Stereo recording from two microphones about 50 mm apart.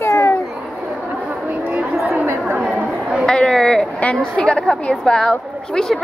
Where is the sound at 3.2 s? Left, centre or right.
Centre.